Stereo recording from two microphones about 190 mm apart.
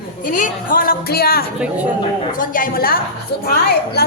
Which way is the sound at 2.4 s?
45° left (ahead or behind).